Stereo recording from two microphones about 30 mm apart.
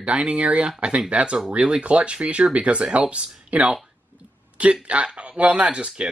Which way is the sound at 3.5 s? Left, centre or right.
Right.